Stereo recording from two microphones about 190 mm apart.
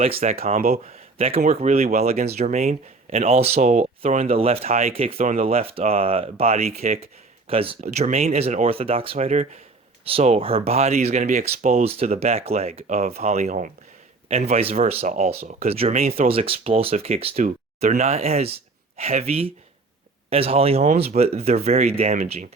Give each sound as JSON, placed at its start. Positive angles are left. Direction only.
{"t": 0.2, "sound": "speech", "side_deg": -50}
{"t": 0.9, "sound": "speech", "side_deg": -30}
{"t": 7.8, "sound": "speech", "side_deg": -40}